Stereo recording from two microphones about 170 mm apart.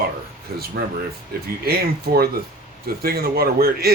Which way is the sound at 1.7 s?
65° right (ahead or behind).